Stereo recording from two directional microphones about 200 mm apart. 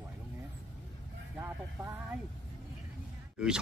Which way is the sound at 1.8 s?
10° right (ahead or behind).